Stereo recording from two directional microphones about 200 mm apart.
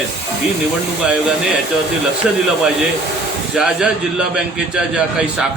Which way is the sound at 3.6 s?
5° right (ahead or behind).